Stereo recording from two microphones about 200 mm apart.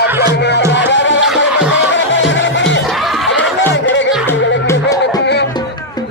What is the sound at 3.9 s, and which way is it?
Music, 65° left (ahead or behind).